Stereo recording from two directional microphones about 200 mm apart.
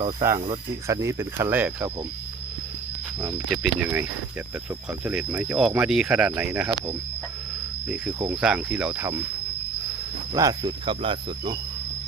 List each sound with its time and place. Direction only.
0.2 s speech: 15° right (ahead or behind)
3.5 s speech: centre (ahead or behind)
5.0 s speech: 5° right (ahead or behind)
8.3 s speech: 5° right (ahead or behind)
10.3 s cricket: 20° right (ahead or behind)